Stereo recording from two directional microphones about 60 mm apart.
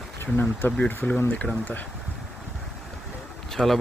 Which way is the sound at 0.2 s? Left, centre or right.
Left.